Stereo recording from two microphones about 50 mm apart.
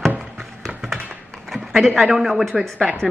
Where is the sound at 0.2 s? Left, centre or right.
Centre.